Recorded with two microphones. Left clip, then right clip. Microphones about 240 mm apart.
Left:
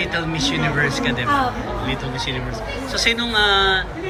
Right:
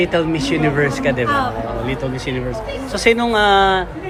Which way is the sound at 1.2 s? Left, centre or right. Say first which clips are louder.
Left 1 dB; centre.